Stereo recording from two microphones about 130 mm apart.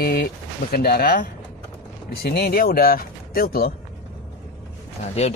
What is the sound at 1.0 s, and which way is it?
Speech, 90° left.